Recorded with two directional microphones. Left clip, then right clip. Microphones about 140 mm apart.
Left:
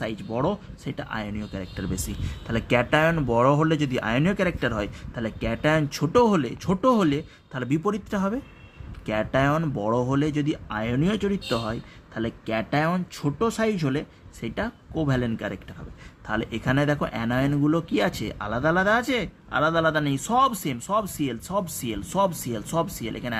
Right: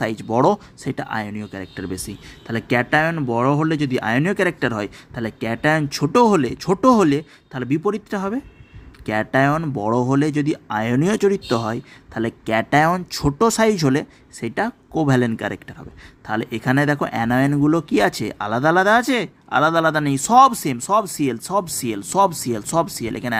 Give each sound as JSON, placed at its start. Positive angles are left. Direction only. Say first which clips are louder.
{"t": 0.0, "sound": "speech", "louder": "right 9 dB", "side_deg": -50}
{"t": 0.9, "sound": "speech", "louder": "right 7 dB", "side_deg": -40}
{"t": 7.5, "sound": "speech", "louder": "right 5 dB", "side_deg": -25}
{"t": 13.4, "sound": "speech", "louder": "right 8 dB", "side_deg": -60}
{"t": 16.2, "sound": "speech", "louder": "right 5 dB", "side_deg": -30}